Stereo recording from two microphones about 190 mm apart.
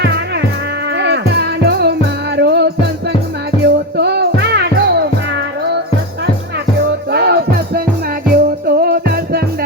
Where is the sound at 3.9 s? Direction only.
60° right (ahead or behind).